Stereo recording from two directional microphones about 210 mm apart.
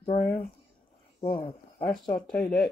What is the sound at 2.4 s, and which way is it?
Speech, 5° left (ahead or behind).